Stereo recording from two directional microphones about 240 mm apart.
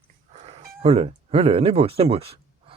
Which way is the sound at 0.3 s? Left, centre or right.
Right.